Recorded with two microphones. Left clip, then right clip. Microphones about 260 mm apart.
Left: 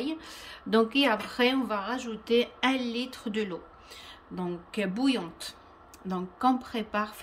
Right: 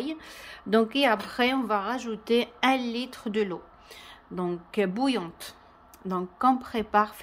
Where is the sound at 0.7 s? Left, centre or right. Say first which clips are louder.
Right 2 dB; centre.